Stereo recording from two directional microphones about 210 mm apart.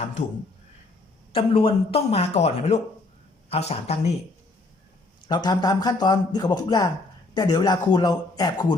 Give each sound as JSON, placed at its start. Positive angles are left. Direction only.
{"t": 1.3, "sound": "a man's voice", "side_deg": 25}
{"t": 5.2, "sound": "a man's voice", "side_deg": 20}